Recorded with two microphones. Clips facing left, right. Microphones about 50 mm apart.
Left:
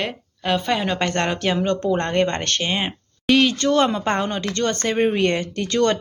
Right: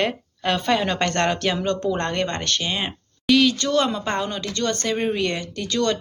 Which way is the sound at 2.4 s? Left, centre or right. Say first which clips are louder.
Left 2 dB; left.